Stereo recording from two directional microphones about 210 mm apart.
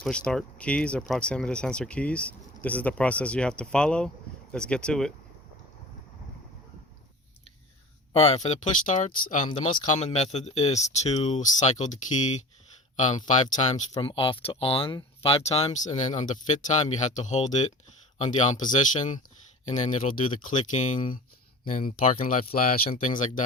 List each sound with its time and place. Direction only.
0.0 s speech: 5° left (ahead or behind)
8.1 s speech: 30° left (ahead or behind)
9.5 s speech: 20° left (ahead or behind)
13.0 s speech: 35° left (ahead or behind)
20.4 s speech: 35° left (ahead or behind)